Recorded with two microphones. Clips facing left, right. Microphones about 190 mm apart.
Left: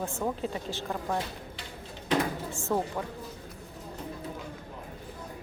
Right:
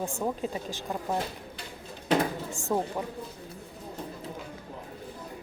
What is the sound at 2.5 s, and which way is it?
Speech, 15° right (ahead or behind).